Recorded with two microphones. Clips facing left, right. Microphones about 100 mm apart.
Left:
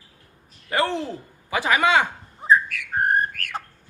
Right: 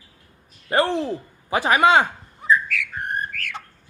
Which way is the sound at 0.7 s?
30° right (ahead or behind).